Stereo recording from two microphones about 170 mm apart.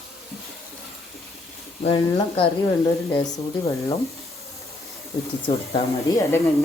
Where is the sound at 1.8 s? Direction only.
35° left (ahead or behind).